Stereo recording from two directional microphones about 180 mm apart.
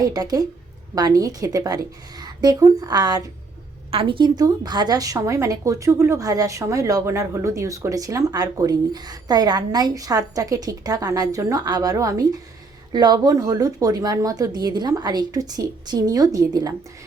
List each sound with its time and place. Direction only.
0.0 s a woman's voice: 20° right (ahead or behind)